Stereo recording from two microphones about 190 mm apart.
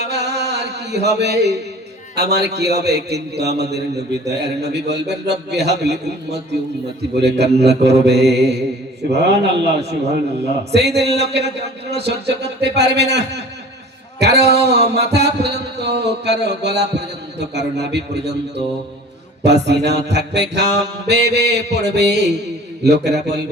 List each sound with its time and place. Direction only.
0.0 s a sound: 65° right (ahead or behind)
2.1 s a man's voice: 60° right (ahead or behind)
10.7 s a man's voice: 60° right (ahead or behind)